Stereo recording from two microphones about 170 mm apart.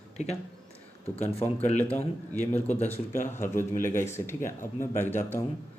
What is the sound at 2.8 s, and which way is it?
Speech, 50° left (ahead or behind).